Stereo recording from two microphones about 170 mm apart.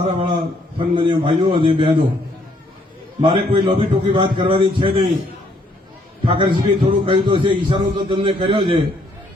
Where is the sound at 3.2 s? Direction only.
30° right (ahead or behind).